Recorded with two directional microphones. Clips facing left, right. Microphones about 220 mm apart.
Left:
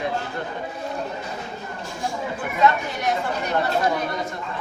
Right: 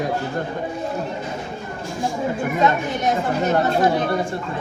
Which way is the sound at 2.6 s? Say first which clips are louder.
Even; 20° right (ahead or behind).